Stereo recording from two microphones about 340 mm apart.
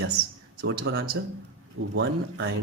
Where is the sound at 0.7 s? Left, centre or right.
Right.